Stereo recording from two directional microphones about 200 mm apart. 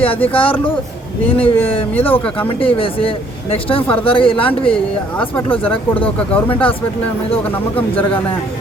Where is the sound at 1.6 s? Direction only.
25° left (ahead or behind).